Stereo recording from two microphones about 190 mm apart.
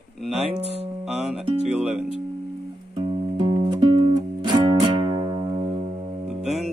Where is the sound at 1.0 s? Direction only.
Centre (ahead or behind).